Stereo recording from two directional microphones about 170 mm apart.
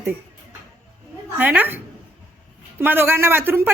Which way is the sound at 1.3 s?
10° right (ahead or behind).